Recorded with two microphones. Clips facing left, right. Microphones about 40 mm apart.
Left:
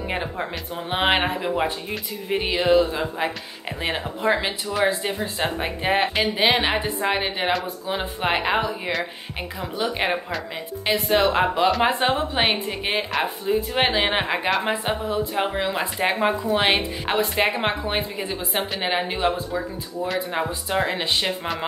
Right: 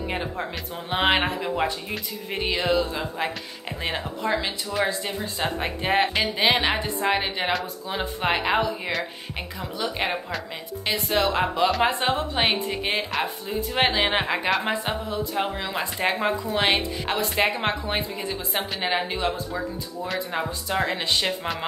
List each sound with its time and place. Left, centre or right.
0.1 s speech: centre
4.2 s a woman's voice: left
5.6 s speech: centre
9.6 s a woman's voice: left
11.1 s speech: left
15.1 s a woman's voice: left
20.3 s speech: centre